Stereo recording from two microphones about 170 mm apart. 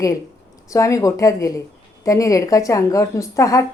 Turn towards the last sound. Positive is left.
turn(degrees=20)  # may be behind; listen again after turning